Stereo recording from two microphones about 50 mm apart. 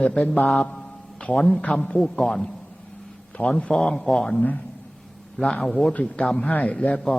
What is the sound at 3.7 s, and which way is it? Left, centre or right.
Speech, centre.